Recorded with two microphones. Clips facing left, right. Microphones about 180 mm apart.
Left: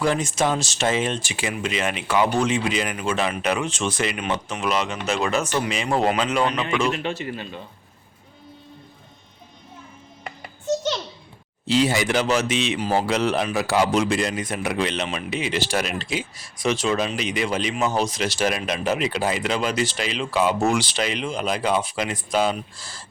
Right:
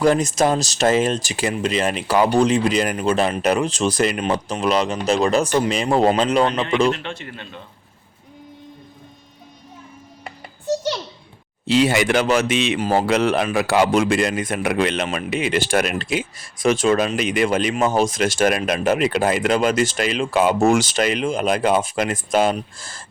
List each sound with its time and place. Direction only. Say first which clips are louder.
0.0 s speech: right 5 dB; 40° right (ahead or behind)
6.9 s speech: left 3 dB; 5° left (ahead or behind)
10.7 s a sound: right 1 dB; 10° right (ahead or behind)
11.6 s speech: right 3 dB; 60° right (ahead or behind)